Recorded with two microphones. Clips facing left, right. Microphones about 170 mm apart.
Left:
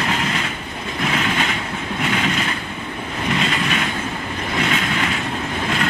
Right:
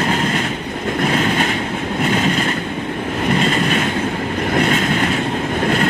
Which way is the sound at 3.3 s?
40° right (ahead or behind).